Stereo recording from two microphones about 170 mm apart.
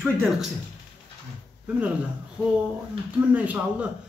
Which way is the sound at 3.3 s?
10° right (ahead or behind).